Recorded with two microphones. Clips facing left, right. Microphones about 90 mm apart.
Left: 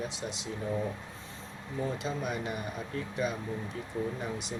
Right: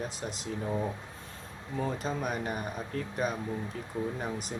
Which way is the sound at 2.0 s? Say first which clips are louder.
Right 1 dB; 45° right (ahead or behind).